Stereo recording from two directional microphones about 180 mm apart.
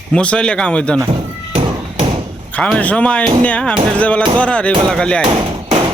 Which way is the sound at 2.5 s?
5° left (ahead or behind).